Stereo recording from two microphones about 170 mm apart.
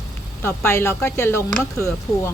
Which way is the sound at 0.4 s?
15° left (ahead or behind).